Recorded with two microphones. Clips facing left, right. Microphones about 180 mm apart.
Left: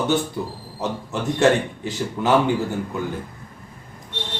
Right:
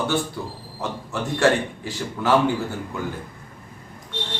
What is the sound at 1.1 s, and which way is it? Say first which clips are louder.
Speech: left 2 dB; 20° left (ahead or behind).